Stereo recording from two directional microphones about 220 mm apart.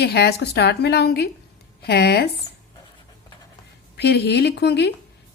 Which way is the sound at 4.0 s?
50° left (ahead or behind).